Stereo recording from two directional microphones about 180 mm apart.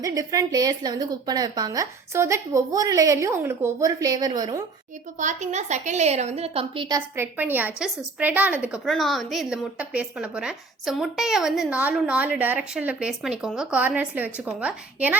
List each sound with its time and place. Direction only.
0.0 s a woman's voice: 20° right (ahead or behind)
5.2 s a woman's voice: 40° right (ahead or behind); by 15.2 s 10° right (ahead or behind)